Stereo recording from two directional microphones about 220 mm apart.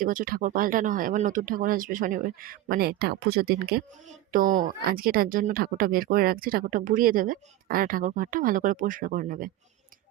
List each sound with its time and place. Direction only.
0.0 s a woman's voice: 40° right (ahead or behind)